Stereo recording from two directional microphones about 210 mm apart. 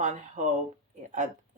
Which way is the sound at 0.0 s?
35° right (ahead or behind).